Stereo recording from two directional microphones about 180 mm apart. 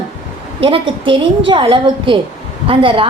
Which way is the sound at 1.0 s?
30° right (ahead or behind).